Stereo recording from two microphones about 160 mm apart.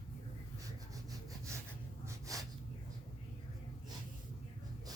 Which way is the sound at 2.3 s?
20° right (ahead or behind).